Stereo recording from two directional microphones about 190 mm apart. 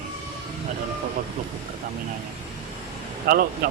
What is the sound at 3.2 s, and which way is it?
Speech, 50° right (ahead or behind).